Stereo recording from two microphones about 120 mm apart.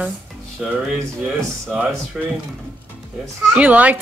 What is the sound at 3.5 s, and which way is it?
Speech, 10° right (ahead or behind).